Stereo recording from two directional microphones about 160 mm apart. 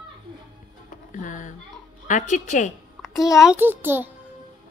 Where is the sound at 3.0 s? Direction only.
Centre (ahead or behind).